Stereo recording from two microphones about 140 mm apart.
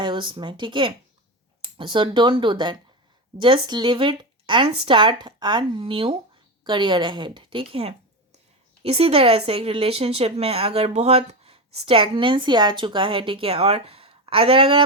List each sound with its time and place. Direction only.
0.0 s a woman's voice: 35° right (ahead or behind)